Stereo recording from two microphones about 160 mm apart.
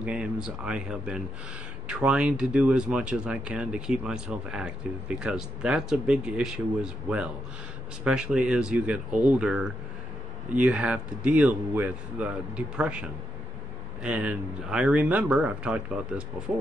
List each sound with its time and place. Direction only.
0.0 s speech: 5° right (ahead or behind)
14.0 s speech: 5° right (ahead or behind)